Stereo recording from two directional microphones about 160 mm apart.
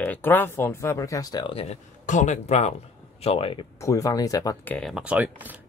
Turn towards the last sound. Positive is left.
turn(degrees=-10)  # may be behind; listen again after turning